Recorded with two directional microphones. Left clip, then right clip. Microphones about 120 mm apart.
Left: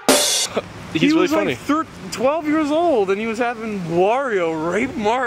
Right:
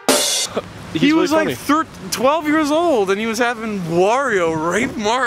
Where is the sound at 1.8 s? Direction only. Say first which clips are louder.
Right 3 dB; 55° right (ahead or behind).